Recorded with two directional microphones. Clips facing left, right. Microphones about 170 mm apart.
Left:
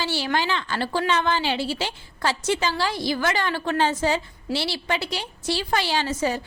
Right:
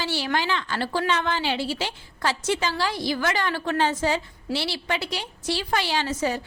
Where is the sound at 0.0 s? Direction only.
30° left (ahead or behind).